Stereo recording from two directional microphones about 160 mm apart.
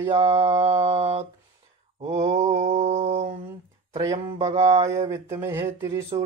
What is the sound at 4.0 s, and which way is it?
Speech, 20° right (ahead or behind).